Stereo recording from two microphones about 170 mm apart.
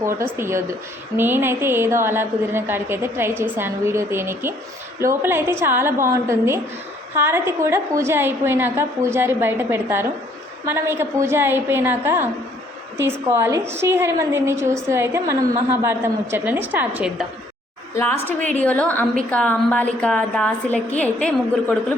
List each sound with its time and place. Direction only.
0.0 s a woman's voice: 15° right (ahead or behind)
17.9 s a woman's voice: 15° left (ahead or behind)